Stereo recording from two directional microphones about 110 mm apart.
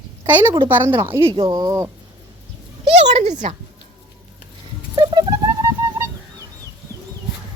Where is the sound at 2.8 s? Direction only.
90° right.